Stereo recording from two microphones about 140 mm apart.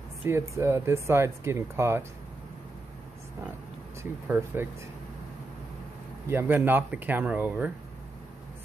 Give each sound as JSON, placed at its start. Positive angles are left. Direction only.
{"t": 0.2, "sound": "speech", "side_deg": -15}
{"t": 4.0, "sound": "speech", "side_deg": -15}
{"t": 6.2, "sound": "speech", "side_deg": -15}